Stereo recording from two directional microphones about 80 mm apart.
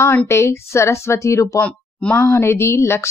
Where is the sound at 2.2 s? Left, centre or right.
Left.